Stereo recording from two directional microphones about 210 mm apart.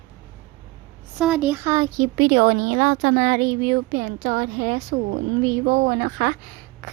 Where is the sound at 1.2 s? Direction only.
5° right (ahead or behind).